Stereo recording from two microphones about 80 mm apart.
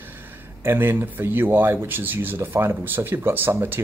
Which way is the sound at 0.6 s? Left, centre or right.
Right.